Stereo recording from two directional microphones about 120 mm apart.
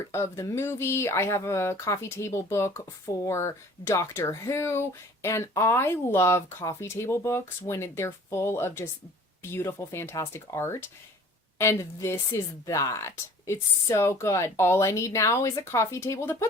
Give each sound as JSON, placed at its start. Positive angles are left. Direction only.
{"t": 0.1, "sound": "speech", "side_deg": 25}